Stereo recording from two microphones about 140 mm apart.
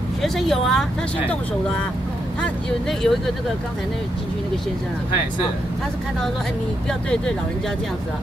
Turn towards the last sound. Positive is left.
turn(degrees=5)  # may be behind; listen again after turning